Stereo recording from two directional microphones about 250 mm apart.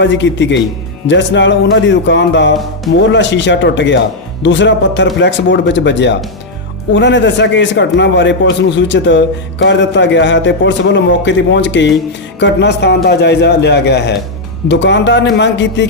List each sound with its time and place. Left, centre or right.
0.0 s a man's voice: left